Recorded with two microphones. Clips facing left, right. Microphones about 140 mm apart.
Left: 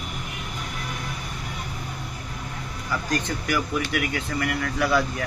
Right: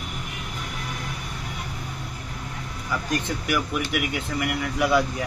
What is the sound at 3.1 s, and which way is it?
Speech, 10° right (ahead or behind).